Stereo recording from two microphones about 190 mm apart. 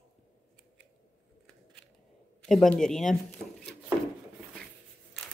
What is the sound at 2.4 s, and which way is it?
Speech, centre (ahead or behind).